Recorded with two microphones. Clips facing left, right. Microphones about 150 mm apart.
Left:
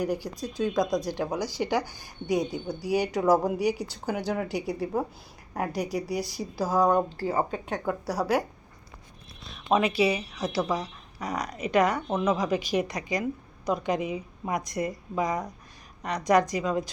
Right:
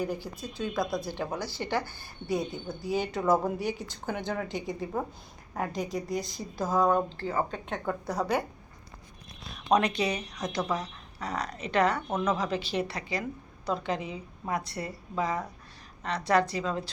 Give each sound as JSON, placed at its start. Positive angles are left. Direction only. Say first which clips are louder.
{"t": 0.0, "sound": "a woman's voice", "louder": "left 4 dB", "side_deg": 10}